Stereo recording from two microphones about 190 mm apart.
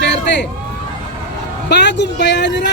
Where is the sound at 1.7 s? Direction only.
65° left (ahead or behind).